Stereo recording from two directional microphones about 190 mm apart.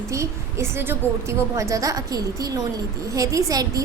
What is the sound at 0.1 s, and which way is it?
A woman's voice, 15° right (ahead or behind).